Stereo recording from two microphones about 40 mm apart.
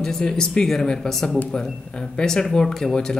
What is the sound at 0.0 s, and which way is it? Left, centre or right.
Speech, centre.